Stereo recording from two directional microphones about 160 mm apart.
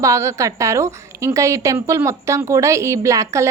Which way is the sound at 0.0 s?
20° right (ahead or behind).